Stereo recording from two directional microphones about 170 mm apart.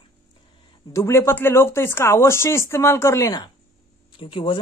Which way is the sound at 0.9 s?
15° left (ahead or behind).